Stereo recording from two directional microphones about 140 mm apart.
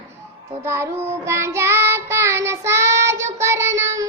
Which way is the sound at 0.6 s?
20° right (ahead or behind).